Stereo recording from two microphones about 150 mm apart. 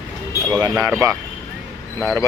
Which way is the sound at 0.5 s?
20° right (ahead or behind).